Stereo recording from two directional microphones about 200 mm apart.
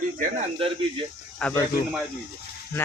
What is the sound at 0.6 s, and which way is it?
Speech, 25° right (ahead or behind).